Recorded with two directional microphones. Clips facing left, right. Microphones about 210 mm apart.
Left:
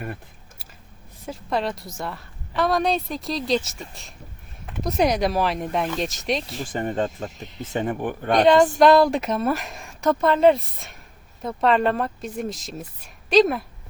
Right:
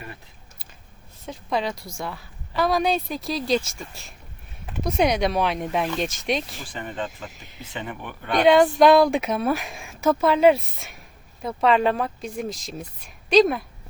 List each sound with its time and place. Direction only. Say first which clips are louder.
1.3 s a woman's voice: left 1 dB; centre (ahead or behind)
6.6 s speech: left 7 dB; 45° left (ahead or behind)
8.4 s a woman's voice: right 1 dB; centre (ahead or behind)